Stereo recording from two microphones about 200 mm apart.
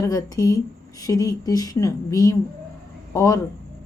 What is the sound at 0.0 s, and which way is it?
Speech, 15° left (ahead or behind).